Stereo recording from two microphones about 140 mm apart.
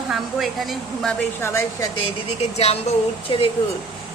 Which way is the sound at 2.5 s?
50° left (ahead or behind).